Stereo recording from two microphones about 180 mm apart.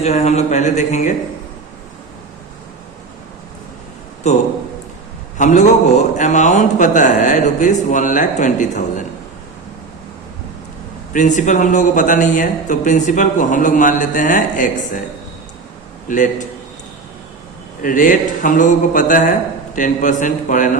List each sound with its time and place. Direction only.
0.0 s speech: 35° left (ahead or behind)
4.2 s a man's voice: 40° left (ahead or behind)
11.1 s a man's voice: 45° left (ahead or behind)
16.0 s a man's voice: 45° left (ahead or behind)
17.8 s a man's voice: 50° left (ahead or behind)